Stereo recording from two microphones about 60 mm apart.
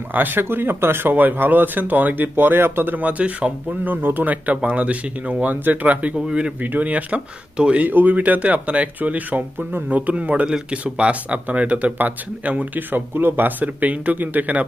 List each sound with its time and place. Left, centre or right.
0.1 s speech: right
7.9 s speech: right